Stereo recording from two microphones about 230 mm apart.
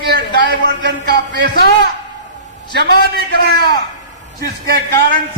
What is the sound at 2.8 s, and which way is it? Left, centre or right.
Speech, right.